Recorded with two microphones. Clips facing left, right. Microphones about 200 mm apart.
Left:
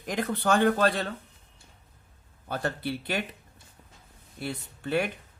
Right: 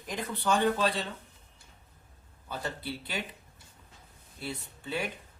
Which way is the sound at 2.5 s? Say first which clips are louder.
Left 6 dB; 65° left (ahead or behind).